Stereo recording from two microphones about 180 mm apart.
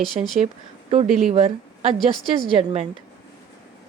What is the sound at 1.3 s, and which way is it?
Speech, 30° right (ahead or behind).